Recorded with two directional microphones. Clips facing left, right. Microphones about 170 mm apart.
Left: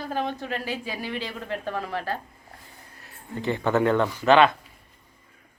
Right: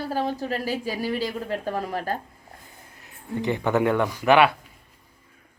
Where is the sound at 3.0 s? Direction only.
15° right (ahead or behind).